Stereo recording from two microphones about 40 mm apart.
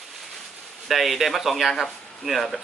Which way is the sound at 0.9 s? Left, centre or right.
Centre.